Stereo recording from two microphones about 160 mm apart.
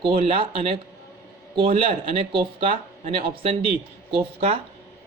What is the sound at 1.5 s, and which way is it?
Speech, 35° right (ahead or behind).